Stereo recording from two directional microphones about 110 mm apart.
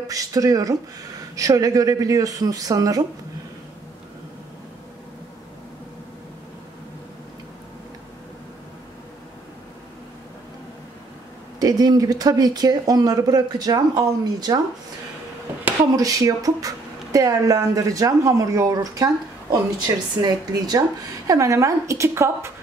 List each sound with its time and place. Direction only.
0.1 s speech: 30° right (ahead or behind)
11.6 s speech: 35° right (ahead or behind)
16.0 s speech: 35° right (ahead or behind)
20.2 s a woman's voice: 35° right (ahead or behind)